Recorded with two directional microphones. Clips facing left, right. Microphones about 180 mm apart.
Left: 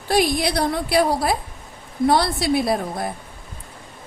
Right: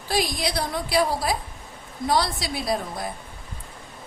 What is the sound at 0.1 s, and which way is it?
A woman's voice, 60° left (ahead or behind).